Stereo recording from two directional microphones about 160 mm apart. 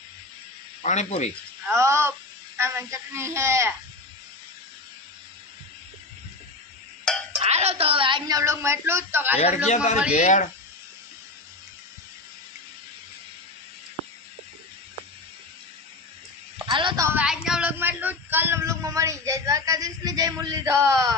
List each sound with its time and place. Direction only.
0.8 s speech: 45° left (ahead or behind)
1.6 s a man's voice: 15° right (ahead or behind)
7.4 s speech: 40° right (ahead or behind); by 9.4 s 15° right (ahead or behind)
9.6 s speech: 45° left (ahead or behind)
16.6 s a woman's voice: 30° right (ahead or behind)
17.0 s a man's voice: 15° right (ahead or behind)
17.2 s a sound: 5° right (ahead or behind); by 21.2 s 20° right (ahead or behind)